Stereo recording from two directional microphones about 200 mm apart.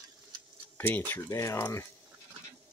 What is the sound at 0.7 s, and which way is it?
Speech, 10° left (ahead or behind).